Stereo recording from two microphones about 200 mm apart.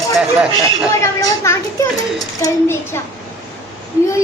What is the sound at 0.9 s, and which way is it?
A child's voice, 15° left (ahead or behind).